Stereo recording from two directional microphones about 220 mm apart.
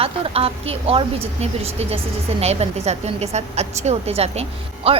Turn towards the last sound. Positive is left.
turn(degrees=-25)  # may be behind; listen again after turning